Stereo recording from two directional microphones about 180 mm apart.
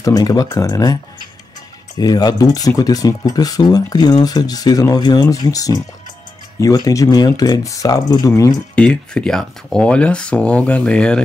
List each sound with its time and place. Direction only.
0.0 s speech: 20° left (ahead or behind)
2.0 s speech: 20° left (ahead or behind)
8.7 s speech: 5° left (ahead or behind)